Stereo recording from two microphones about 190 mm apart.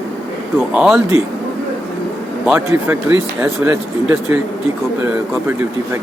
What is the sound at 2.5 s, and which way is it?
Speech, 10° right (ahead or behind).